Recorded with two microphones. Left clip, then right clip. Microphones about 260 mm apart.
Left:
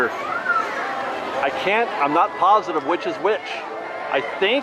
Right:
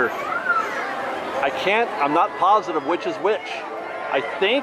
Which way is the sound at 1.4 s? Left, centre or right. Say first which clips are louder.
Even; centre.